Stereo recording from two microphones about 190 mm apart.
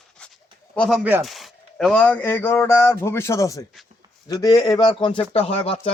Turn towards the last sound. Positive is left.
turn(degrees=30)  # may be behind; listen again after turning